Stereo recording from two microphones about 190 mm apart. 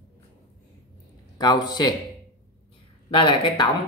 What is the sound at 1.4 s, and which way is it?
Speech, 20° left (ahead or behind).